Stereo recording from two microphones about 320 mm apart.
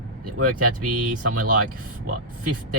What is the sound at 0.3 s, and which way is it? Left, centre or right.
Speech, right.